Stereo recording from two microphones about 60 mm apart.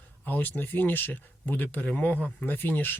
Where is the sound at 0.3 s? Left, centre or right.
Left.